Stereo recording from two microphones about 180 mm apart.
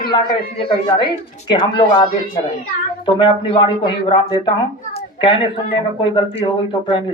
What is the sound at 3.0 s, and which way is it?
A man's voice, 25° left (ahead or behind).